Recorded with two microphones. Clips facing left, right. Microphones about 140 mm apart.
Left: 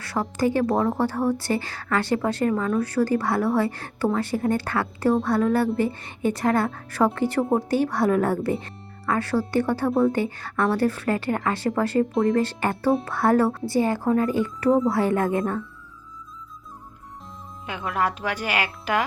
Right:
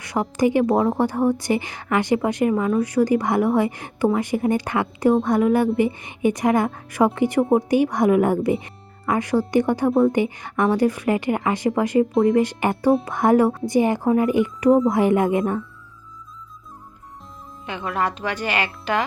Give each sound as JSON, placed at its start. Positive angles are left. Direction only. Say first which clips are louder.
{"t": 0.0, "sound": "speech", "louder": "right 3 dB", "side_deg": -15}
{"t": 0.7, "sound": "a woman's voice", "louder": "right 3 dB", "side_deg": -5}
{"t": 12.1, "sound": "speech", "louder": "right 5 dB", "side_deg": -5}
{"t": 12.4, "sound": "a woman's voice", "louder": "right 4 dB", "side_deg": -15}
{"t": 17.7, "sound": "speech", "louder": "right 1 dB", "side_deg": 5}